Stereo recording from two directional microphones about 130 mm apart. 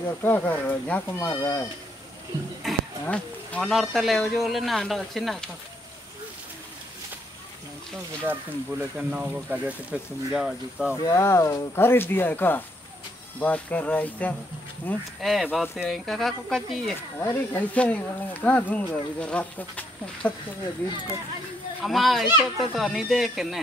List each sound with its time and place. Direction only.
0.2 s speech: 15° left (ahead or behind)
2.6 s speech: 5° left (ahead or behind)
8.3 s speech: 10° right (ahead or behind)
11.0 s speech: 25° left (ahead or behind)
15.1 s speech: centre (ahead or behind)
17.2 s speech: 15° left (ahead or behind)
21.8 s speech: centre (ahead or behind)